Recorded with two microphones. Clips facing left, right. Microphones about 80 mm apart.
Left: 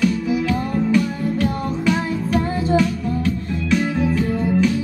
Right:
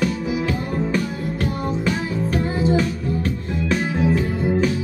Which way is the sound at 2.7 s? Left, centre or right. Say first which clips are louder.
Left 3 dB; right.